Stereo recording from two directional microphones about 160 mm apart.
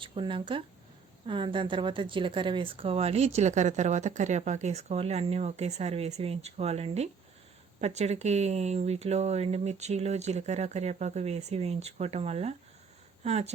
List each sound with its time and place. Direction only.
0.0 s speech: 30° right (ahead or behind)